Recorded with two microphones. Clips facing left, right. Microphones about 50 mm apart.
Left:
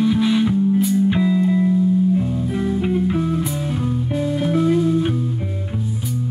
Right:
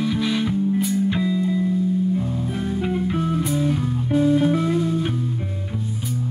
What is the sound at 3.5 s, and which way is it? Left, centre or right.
Music, centre.